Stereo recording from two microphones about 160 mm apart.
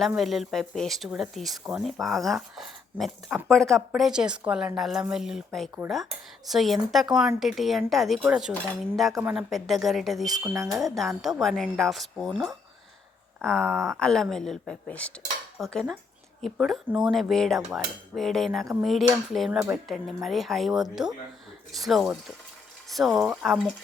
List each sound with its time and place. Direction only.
0.2 s speech: centre (ahead or behind)
10.3 s speech: 20° right (ahead or behind)
10.7 s speech: centre (ahead or behind)
13.4 s speech: 5° left (ahead or behind)